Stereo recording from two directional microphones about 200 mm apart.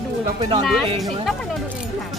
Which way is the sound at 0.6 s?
Centre (ahead or behind).